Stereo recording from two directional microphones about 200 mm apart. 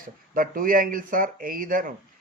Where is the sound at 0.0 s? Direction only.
45° right (ahead or behind).